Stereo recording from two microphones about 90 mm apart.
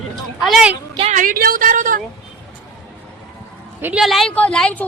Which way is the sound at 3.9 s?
Centre (ahead or behind).